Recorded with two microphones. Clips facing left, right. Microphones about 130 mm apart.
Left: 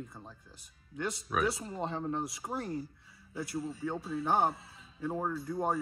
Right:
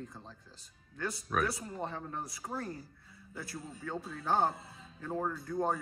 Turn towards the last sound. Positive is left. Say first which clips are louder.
# left 1 dB
turn(degrees=5)  # may be behind; listen again after turning